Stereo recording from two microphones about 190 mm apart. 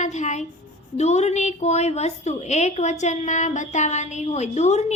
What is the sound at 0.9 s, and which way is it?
A woman's voice, 35° left (ahead or behind).